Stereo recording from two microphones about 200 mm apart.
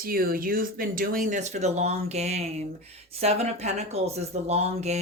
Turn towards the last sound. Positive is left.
turn(degrees=-35)  # may be behind; listen again after turning